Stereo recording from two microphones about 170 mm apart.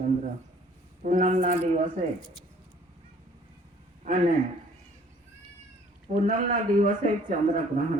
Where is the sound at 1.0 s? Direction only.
45° right (ahead or behind).